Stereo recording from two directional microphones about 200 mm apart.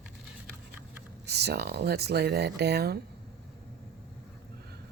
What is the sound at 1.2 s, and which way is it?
Speech, 55° right (ahead or behind).